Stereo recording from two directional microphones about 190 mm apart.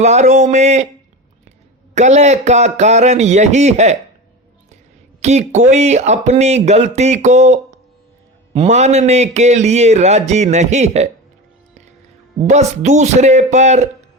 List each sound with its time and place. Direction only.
0.0 s speech: 35° right (ahead or behind)
2.0 s speech: 35° right (ahead or behind)
5.2 s speech: 35° right (ahead or behind)
12.4 s speech: 35° right (ahead or behind)